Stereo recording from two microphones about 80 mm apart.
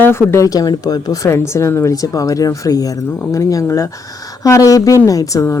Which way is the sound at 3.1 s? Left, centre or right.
Left.